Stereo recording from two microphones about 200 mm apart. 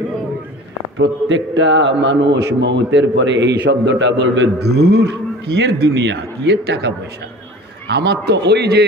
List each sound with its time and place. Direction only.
0.9 s a man's voice: 65° right (ahead or behind)
7.9 s a man's voice: 55° right (ahead or behind)